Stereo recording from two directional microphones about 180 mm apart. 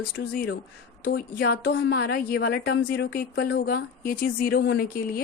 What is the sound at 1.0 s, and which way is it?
A woman's voice, 60° left (ahead or behind).